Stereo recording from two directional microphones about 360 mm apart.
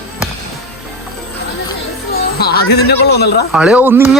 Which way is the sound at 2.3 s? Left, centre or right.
Left.